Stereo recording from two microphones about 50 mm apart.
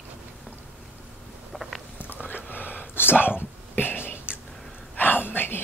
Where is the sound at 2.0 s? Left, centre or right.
Left.